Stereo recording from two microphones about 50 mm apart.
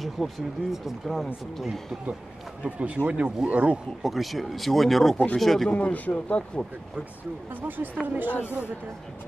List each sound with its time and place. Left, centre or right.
0.0 s speech: centre
2.6 s speech: right
4.0 s speech: centre
5.7 s speech: left
7.6 s a woman's voice: right